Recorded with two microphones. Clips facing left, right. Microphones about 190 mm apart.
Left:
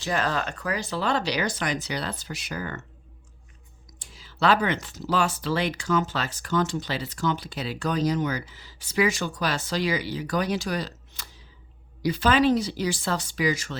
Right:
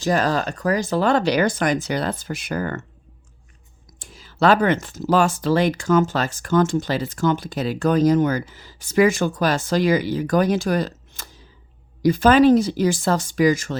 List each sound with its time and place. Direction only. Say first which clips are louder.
0.0 s speech: right 7 dB; 40° right (ahead or behind)
4.0 s speech: right 6 dB; 50° right (ahead or behind)